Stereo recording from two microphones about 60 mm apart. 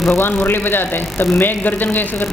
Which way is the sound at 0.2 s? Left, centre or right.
Left.